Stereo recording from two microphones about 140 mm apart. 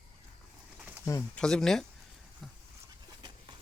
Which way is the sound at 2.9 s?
30° right (ahead or behind).